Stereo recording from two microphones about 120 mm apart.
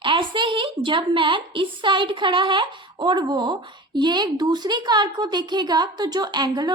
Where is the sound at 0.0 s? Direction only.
45° right (ahead or behind).